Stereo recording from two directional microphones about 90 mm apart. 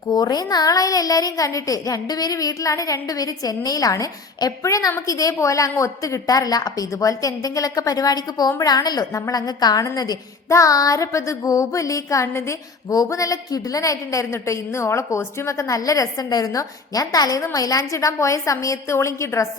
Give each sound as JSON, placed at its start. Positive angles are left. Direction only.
{"t": 0.1, "sound": "a woman's voice", "side_deg": 50}